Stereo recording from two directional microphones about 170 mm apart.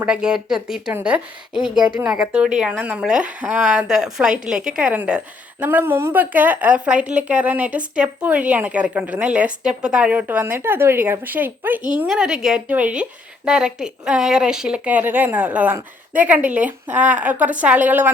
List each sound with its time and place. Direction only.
0.0 s a woman's voice: 5° right (ahead or behind)